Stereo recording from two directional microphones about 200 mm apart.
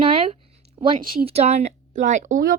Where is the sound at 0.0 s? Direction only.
25° right (ahead or behind).